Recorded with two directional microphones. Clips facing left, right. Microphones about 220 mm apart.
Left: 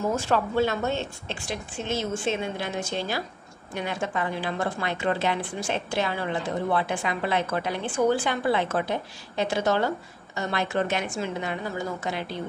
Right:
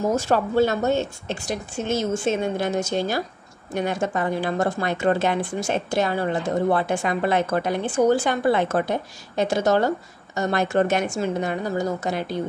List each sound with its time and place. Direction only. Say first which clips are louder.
0.1 s a woman's voice: right 4 dB; 40° right (ahead or behind)